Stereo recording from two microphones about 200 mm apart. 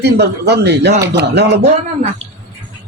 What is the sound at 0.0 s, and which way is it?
Speech, 55° right (ahead or behind).